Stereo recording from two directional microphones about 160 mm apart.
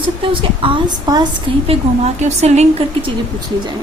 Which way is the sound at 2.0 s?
45° right (ahead or behind).